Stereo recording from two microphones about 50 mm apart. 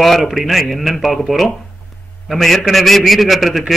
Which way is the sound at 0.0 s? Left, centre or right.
Centre.